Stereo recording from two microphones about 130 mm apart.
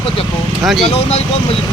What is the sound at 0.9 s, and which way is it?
Speech, 50° left (ahead or behind).